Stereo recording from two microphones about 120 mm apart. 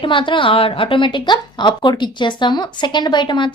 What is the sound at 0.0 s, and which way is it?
A woman's voice, 45° left (ahead or behind).